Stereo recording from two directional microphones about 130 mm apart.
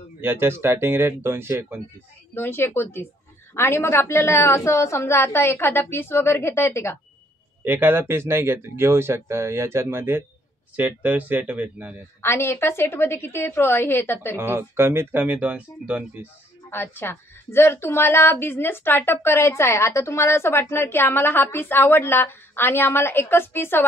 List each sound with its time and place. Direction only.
0.2 s speech: 15° right (ahead or behind)
2.3 s a woman's voice: 15° left (ahead or behind)
7.6 s speech: 15° right (ahead or behind)
12.2 s a woman's voice: 20° left (ahead or behind)
14.3 s speech: 15° right (ahead or behind)
16.7 s a woman's voice: 15° left (ahead or behind)